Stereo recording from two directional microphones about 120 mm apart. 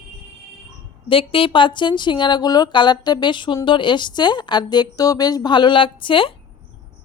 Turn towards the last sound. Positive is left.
turn(degrees=45)  # may be behind; listen again after turning